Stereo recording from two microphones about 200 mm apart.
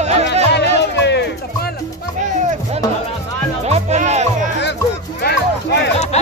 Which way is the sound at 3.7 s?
35° right (ahead or behind).